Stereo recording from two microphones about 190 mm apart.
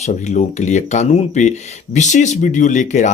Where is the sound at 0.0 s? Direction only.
35° left (ahead or behind).